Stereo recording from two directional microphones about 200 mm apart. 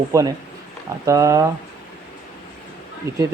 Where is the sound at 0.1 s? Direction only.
15° right (ahead or behind).